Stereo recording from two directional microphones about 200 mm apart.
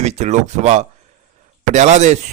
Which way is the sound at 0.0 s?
35° right (ahead or behind).